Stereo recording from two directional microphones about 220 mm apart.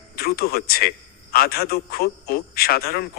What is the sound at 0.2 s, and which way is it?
A man's voice, 45° left (ahead or behind).